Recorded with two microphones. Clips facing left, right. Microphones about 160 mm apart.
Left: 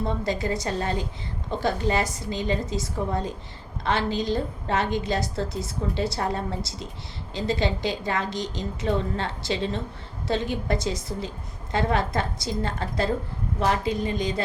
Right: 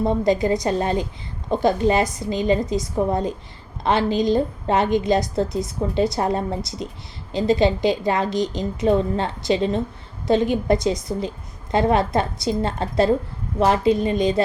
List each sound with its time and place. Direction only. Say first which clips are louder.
0.1 s a woman's voice: right 8 dB; 20° right (ahead or behind)
5.5 s speech: right 5 dB; 25° left (ahead or behind)
6.1 s a woman's voice: right 5 dB; 20° right (ahead or behind)